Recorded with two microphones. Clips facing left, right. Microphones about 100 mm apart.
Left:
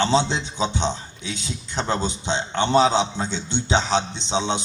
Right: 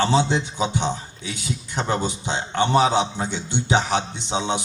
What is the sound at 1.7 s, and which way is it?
A man's voice, 15° right (ahead or behind).